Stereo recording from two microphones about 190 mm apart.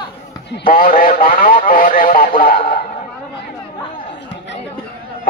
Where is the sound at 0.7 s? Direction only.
45° left (ahead or behind).